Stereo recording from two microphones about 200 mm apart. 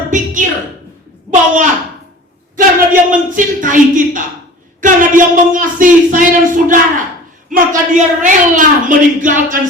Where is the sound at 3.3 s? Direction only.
40° right (ahead or behind).